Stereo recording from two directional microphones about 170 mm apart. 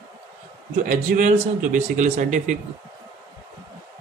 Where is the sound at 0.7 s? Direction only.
45° right (ahead or behind).